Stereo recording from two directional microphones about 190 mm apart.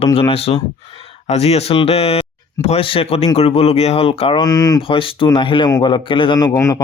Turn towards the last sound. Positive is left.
turn(degrees=15)  # may be behind; listen again after turning